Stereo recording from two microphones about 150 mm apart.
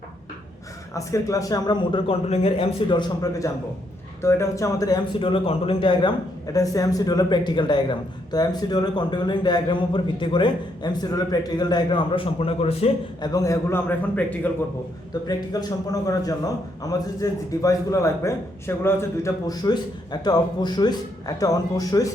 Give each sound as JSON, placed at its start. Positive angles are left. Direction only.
{"t": 0.9, "sound": "a man's voice", "side_deg": 20}
{"t": 13.2, "sound": "a man's voice", "side_deg": 25}
{"t": 15.3, "sound": "a man's voice", "side_deg": 25}